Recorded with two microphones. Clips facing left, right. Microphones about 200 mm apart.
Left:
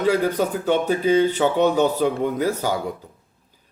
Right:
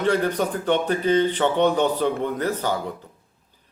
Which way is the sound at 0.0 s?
10° left (ahead or behind).